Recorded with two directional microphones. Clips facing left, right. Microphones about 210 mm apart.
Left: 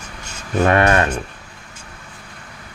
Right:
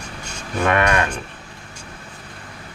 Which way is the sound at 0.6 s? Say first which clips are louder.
Left 3 dB; 40° left (ahead or behind).